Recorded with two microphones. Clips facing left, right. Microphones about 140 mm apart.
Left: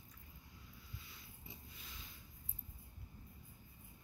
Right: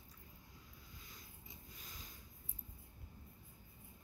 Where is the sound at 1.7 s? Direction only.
40° right (ahead or behind).